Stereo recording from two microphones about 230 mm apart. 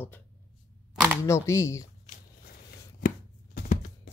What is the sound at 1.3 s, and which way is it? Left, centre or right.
Speech, centre.